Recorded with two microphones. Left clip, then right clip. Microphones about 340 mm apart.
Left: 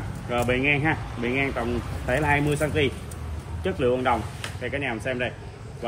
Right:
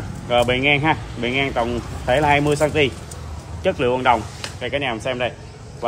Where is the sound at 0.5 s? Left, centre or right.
Centre.